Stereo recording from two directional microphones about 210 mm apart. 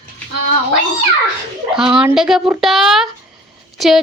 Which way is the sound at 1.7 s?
Centre (ahead or behind).